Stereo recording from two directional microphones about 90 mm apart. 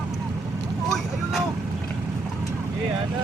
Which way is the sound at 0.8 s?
Centre (ahead or behind).